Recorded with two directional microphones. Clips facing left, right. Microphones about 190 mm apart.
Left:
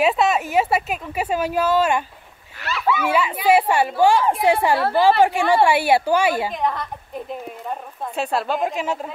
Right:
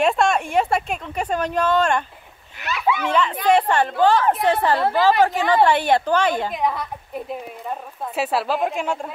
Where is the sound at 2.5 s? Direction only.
15° right (ahead or behind).